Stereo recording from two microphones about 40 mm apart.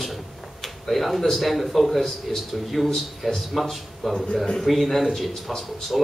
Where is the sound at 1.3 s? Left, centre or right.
Centre.